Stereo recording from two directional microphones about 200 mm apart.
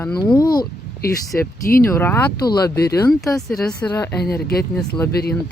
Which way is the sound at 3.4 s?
Centre (ahead or behind).